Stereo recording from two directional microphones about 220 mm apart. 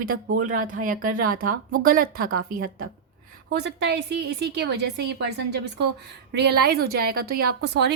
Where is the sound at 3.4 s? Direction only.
50° right (ahead or behind).